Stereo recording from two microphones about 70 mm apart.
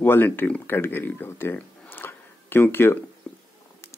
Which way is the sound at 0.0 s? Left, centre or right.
Left.